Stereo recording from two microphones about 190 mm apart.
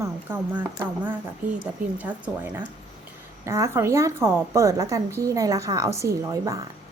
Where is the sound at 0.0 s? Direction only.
10° right (ahead or behind).